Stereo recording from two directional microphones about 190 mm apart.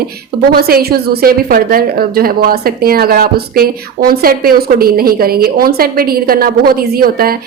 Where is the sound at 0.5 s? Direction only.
55° right (ahead or behind).